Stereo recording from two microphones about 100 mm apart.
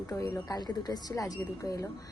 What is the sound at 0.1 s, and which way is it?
Speech, 35° left (ahead or behind).